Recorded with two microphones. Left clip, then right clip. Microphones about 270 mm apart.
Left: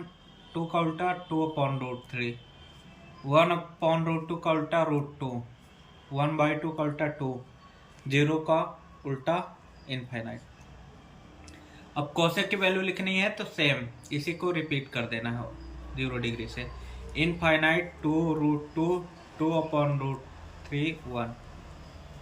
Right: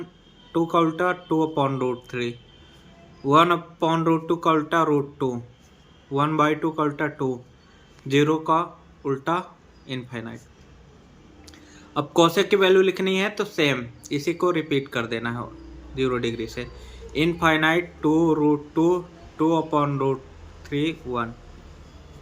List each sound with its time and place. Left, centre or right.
0.5 s speech: centre
11.9 s speech: centre